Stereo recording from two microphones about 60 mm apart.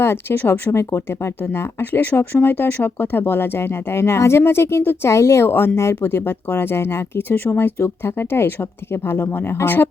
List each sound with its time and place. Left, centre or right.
0.0 s speech: left
0.7 s speech: left
1.8 s speech: left
6.0 s speech: left